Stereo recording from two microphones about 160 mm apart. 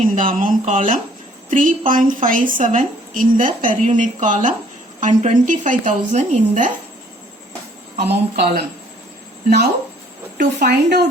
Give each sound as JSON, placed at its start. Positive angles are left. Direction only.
{"t": 0.0, "sound": "a woman's voice", "side_deg": -55}
{"t": 7.9, "sound": "speech", "side_deg": -85}
{"t": 10.3, "sound": "a woman's voice", "side_deg": -85}